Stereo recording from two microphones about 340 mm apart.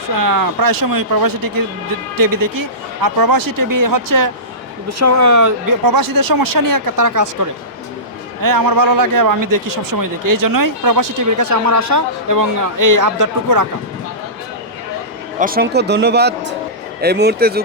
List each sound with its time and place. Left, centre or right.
0.2 s speech: right
4.9 s speech: right
8.4 s speech: right
15.4 s speech: right